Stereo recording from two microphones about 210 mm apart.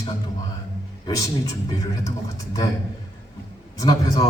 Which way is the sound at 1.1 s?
15° left (ahead or behind).